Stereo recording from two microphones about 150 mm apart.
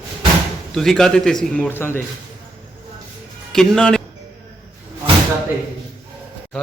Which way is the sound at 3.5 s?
5° left (ahead or behind).